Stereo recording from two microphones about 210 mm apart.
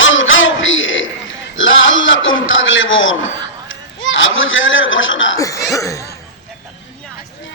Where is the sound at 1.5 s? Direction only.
65° left (ahead or behind).